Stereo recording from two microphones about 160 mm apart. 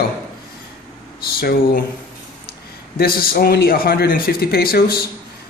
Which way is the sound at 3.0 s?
70° left (ahead or behind).